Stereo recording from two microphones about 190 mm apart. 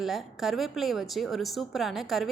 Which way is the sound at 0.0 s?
Centre (ahead or behind).